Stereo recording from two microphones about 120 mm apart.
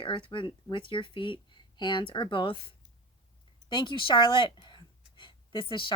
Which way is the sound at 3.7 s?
45° left (ahead or behind).